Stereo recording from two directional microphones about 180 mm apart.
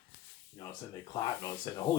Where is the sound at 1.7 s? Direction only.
15° left (ahead or behind).